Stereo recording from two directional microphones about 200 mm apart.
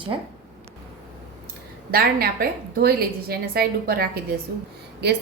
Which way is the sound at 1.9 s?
50° right (ahead or behind).